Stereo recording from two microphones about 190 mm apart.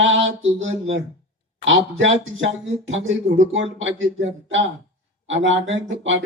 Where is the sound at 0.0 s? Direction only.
85° right.